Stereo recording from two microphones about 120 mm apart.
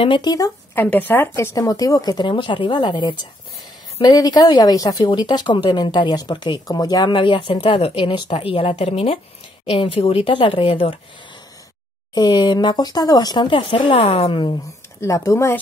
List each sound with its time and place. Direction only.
0.0 s speech: 40° left (ahead or behind)
0.7 s speech: 15° left (ahead or behind); by 11.0 s 50° left (ahead or behind)
12.1 s speech: 35° left (ahead or behind)
13.9 s a woman's voice: 60° left (ahead or behind)
15.0 s speech: 25° left (ahead or behind)